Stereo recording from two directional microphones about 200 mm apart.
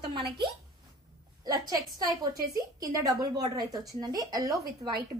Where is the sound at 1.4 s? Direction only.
20° right (ahead or behind).